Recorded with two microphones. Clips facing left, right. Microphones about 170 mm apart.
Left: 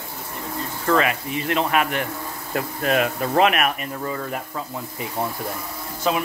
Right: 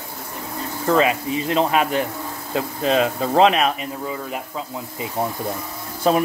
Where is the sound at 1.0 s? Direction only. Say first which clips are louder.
Right 3 dB; 25° right (ahead or behind).